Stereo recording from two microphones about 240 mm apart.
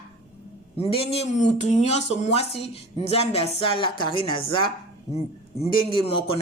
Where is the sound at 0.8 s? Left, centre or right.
Left.